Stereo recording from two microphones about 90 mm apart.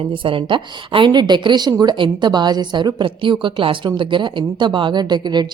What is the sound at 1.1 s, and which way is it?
A woman's voice, 55° right (ahead or behind).